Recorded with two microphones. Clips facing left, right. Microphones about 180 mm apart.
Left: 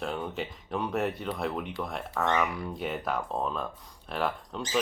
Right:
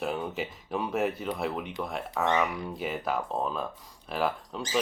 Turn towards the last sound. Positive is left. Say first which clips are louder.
# right 2 dB
turn(degrees=0)  # may be behind; listen again after turning